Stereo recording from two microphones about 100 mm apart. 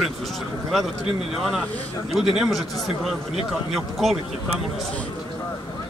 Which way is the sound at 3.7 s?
Centre (ahead or behind).